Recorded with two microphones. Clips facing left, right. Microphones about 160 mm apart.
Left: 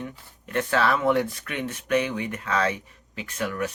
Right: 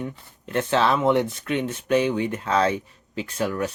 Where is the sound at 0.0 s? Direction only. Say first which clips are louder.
Right 4 dB; 30° right (ahead or behind).